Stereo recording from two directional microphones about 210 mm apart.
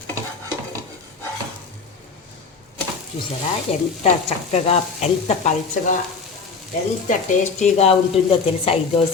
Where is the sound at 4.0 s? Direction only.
30° left (ahead or behind).